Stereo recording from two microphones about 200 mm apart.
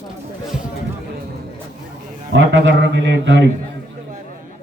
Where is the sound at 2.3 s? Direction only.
65° right (ahead or behind).